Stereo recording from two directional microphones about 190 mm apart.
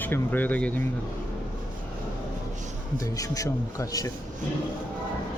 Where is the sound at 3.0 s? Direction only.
15° left (ahead or behind).